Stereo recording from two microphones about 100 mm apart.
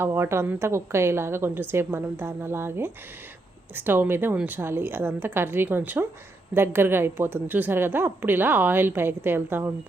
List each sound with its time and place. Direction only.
0.0 s a woman's voice: 25° right (ahead or behind)